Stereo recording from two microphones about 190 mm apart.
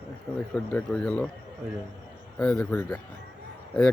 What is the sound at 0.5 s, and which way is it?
Speech, 5° left (ahead or behind).